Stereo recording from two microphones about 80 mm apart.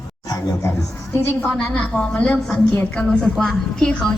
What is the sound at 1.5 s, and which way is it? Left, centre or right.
A woman's voice, centre.